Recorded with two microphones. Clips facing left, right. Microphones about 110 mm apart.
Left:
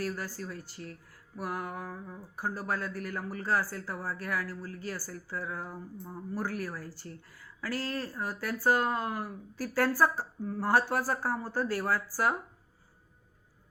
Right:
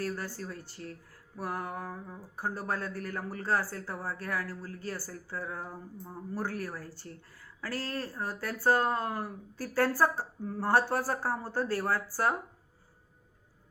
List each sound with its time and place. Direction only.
0.4 s speech: 35° right (ahead or behind)